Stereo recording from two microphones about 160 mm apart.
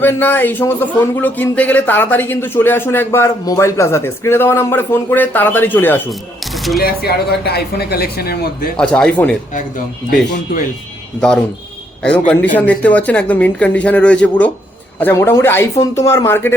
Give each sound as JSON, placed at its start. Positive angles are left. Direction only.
{"t": 0.0, "sound": "speech", "side_deg": 10}
{"t": 6.1, "sound": "speech", "side_deg": 0}
{"t": 6.7, "sound": "speech", "side_deg": 75}
{"t": 8.7, "sound": "speech", "side_deg": 5}
{"t": 9.6, "sound": "speech", "side_deg": 55}
{"t": 11.2, "sound": "speech", "side_deg": 5}
{"t": 12.5, "sound": "speech", "side_deg": 10}